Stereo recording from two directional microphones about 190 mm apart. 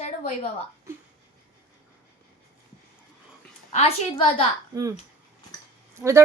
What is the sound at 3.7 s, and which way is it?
Speech, 30° left (ahead or behind).